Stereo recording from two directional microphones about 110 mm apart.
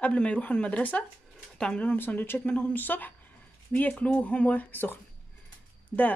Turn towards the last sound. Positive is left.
turn(degrees=20)  # may be behind; listen again after turning